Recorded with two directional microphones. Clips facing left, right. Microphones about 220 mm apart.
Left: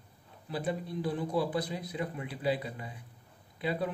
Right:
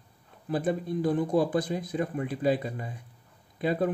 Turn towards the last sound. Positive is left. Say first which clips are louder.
# right 6 dB
turn(degrees=-50)  # may be behind; listen again after turning